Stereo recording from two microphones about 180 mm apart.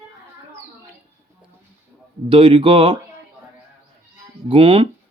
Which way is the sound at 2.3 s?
30° right (ahead or behind).